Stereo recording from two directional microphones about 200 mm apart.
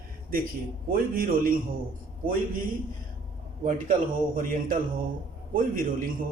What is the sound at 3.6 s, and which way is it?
A man's voice, 40° right (ahead or behind).